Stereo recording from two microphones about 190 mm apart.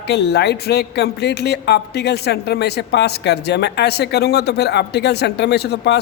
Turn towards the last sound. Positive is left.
turn(degrees=60)  # may be behind; listen again after turning